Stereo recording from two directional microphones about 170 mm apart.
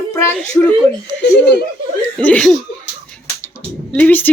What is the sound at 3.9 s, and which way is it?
Speech, 10° left (ahead or behind).